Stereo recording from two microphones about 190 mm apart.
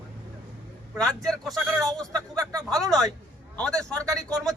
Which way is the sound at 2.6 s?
5° left (ahead or behind).